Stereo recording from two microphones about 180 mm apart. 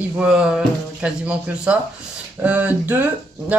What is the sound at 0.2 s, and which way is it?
Speech, 5° right (ahead or behind).